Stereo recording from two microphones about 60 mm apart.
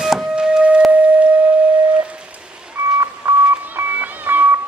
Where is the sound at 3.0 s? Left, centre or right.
Right.